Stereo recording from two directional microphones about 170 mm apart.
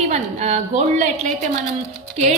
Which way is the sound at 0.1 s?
40° right (ahead or behind).